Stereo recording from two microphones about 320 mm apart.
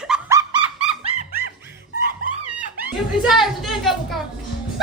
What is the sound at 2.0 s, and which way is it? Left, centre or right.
Music, right.